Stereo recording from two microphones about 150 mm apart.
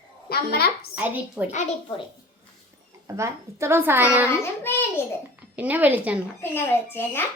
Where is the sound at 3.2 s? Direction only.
20° right (ahead or behind).